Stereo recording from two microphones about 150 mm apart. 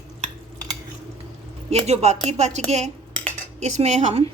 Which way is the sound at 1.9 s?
45° right (ahead or behind).